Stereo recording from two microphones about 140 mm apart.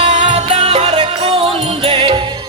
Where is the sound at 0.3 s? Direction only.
50° right (ahead or behind).